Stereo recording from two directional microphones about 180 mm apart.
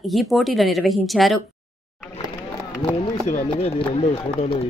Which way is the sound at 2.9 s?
35° left (ahead or behind).